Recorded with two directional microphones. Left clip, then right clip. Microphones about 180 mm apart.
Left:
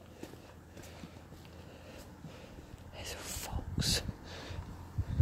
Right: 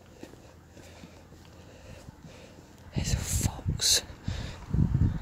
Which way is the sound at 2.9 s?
10° right (ahead or behind).